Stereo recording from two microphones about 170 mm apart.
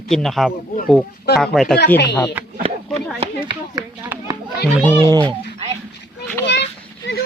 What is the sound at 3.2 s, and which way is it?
Speech, 25° right (ahead or behind).